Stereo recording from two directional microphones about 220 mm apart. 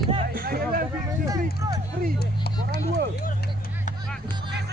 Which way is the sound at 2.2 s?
45° left (ahead or behind).